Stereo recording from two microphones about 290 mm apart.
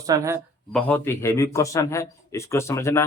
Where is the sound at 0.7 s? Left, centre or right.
Centre.